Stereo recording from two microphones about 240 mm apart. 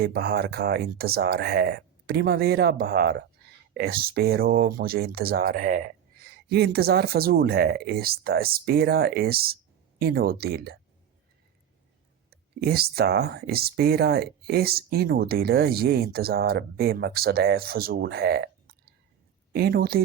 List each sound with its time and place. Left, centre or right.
0.0 s speech: right
12.3 s speech: right